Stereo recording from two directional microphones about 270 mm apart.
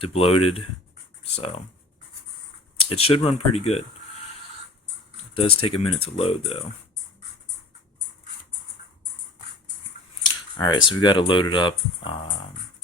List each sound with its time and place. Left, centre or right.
0.0 s speech: left
2.9 s speech: left
5.3 s speech: left
10.2 s scissors: centre
11.0 s speech: centre